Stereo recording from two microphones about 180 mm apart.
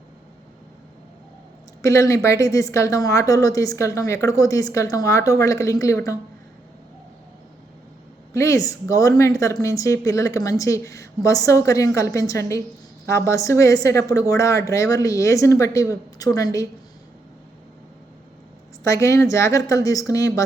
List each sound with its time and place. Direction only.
1.8 s speech: 15° left (ahead or behind)
8.3 s speech: 15° left (ahead or behind)
18.8 s speech: 15° left (ahead or behind)